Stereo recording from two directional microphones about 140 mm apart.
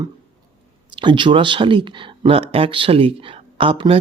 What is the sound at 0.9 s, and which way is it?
Speech, 35° right (ahead or behind).